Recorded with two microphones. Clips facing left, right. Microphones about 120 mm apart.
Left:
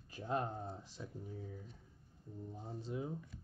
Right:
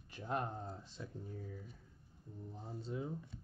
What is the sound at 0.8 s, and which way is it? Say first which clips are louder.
Speech: even; 10° left (ahead or behind).